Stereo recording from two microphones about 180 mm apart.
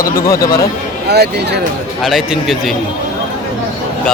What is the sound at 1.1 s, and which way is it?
Speech, 65° right (ahead or behind).